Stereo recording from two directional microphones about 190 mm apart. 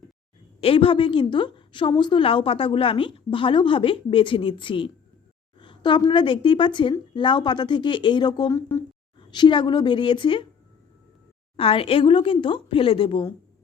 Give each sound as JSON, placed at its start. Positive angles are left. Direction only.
{"t": 0.6, "sound": "a woman's voice", "side_deg": 30}
{"t": 11.5, "sound": "a woman's voice", "side_deg": 30}